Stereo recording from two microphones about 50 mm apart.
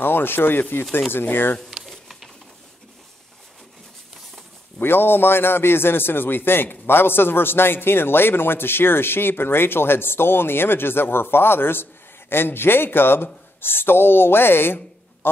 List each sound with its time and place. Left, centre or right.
0.0 s a man's voice: left
1.7 s a sound: centre
4.7 s a man's voice: left